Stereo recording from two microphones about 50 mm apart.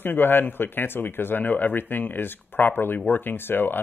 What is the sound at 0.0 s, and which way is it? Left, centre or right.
Speech, left.